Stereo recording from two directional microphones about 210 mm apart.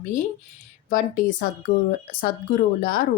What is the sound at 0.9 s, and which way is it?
Speech, 40° left (ahead or behind).